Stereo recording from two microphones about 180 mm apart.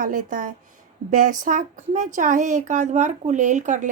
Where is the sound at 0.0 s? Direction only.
45° right (ahead or behind).